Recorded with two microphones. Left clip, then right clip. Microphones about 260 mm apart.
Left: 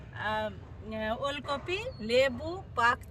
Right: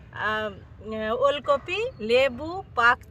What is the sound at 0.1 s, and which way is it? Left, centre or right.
Speech, centre.